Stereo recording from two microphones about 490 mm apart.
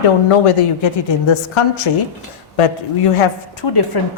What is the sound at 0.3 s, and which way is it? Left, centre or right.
A woman's voice, left.